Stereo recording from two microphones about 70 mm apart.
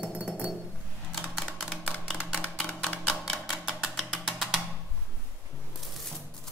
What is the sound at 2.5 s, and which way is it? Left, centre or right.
Typewriter, centre.